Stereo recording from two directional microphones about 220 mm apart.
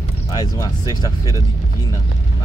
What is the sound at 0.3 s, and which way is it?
Speech, 15° left (ahead or behind).